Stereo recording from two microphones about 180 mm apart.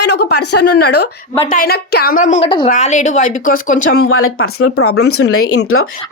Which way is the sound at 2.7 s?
40° left (ahead or behind).